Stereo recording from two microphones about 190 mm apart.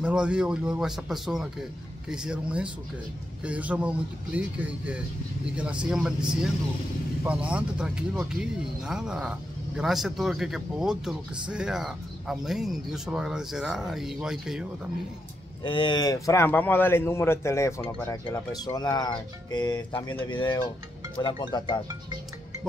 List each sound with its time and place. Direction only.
0.0 s speech: 5° right (ahead or behind)
7.2 s speech: 5° right (ahead or behind)
15.6 s a man's voice: 25° left (ahead or behind)